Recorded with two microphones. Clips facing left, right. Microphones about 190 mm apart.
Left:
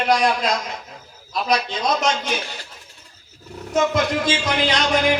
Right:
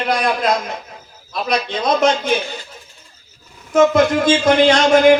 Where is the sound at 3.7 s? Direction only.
50° right (ahead or behind).